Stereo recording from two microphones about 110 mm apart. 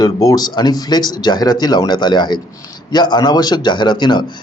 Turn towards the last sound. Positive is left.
turn(degrees=45)  # may be behind; listen again after turning